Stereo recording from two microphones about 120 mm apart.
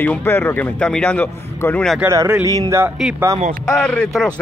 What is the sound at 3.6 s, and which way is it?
Speech, 5° left (ahead or behind).